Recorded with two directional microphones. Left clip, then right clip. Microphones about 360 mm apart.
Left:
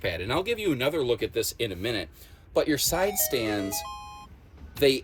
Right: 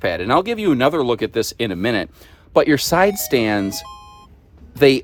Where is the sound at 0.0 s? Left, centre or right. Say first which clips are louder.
Right 11 dB; centre.